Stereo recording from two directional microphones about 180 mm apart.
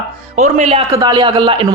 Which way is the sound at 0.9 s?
25° right (ahead or behind).